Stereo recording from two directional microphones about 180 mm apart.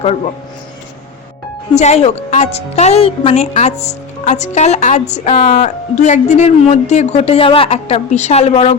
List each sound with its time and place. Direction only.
1.7 s speech: 40° left (ahead or behind)